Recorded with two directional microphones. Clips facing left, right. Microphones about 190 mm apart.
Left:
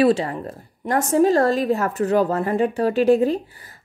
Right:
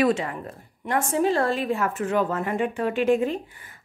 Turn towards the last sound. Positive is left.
turn(degrees=35)  # may be behind; listen again after turning